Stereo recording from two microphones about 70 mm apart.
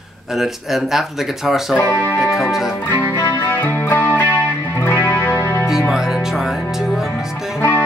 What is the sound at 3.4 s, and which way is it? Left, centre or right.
Music, left.